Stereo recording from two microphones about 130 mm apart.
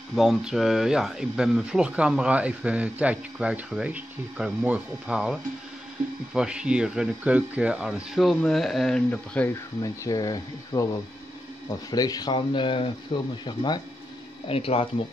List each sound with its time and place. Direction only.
0.1 s speech: centre (ahead or behind)
9.5 s speech: 25° left (ahead or behind)
14.5 s speech: 50° left (ahead or behind)